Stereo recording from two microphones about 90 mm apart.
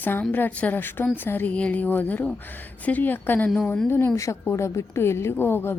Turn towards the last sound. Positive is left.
turn(degrees=25)  # may be behind; listen again after turning